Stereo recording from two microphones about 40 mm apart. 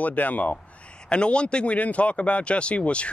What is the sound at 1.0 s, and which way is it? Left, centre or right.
Speech, left.